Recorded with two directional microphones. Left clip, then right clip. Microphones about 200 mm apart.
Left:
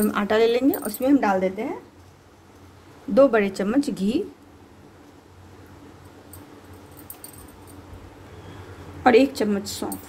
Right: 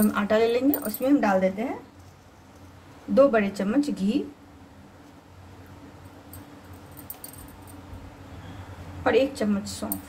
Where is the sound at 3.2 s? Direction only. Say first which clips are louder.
Left 2 dB; 50° left (ahead or behind).